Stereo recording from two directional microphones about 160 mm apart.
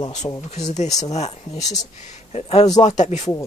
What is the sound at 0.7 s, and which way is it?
Speech, 45° left (ahead or behind).